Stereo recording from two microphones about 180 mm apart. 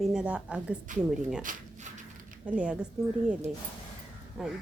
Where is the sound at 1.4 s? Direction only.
45° right (ahead or behind).